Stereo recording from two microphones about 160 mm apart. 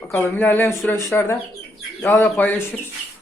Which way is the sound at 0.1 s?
10° left (ahead or behind).